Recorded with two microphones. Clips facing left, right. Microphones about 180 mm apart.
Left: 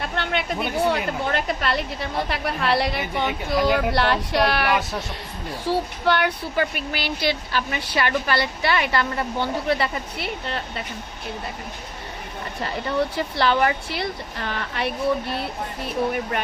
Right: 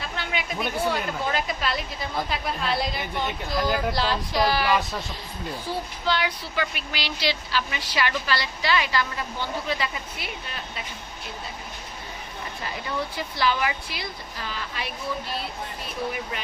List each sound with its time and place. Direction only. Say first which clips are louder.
0.0 s a sound: left 5 dB; 60° left (ahead or behind)
0.9 s a woman's voice: left 3 dB; 60° left (ahead or behind)
5.7 s speech: left 8 dB; 85° left
6.1 s speech: left 4 dB; 60° left (ahead or behind)
12.6 s speech: left 7 dB; 65° left (ahead or behind)